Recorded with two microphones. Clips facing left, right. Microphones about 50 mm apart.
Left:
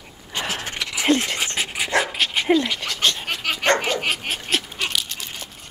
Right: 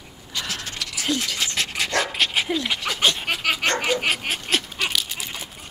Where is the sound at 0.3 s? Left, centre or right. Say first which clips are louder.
Left 3 dB; left.